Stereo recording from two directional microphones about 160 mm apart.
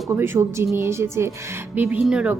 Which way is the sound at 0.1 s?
15° right (ahead or behind).